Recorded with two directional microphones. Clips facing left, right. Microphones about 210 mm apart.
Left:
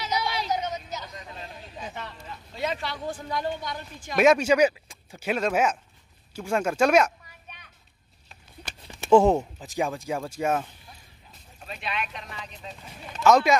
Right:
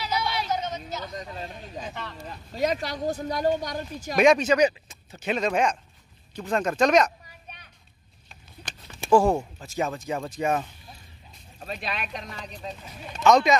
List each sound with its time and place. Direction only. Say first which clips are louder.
0.1 s a sound: even; 15° left (ahead or behind)
1.1 s a sound: right 5 dB; 40° right (ahead or behind)
2.2 s speech: right 5 dB; 40° right (ahead or behind)
4.2 s speech: even; 5° left (ahead or behind)
9.1 s speech: left 2 dB; 20° left (ahead or behind); by 10.7 s 5° left (ahead or behind)
11.6 s speech: right 1 dB; 40° right (ahead or behind)
13.2 s speech: even; 5° left (ahead or behind)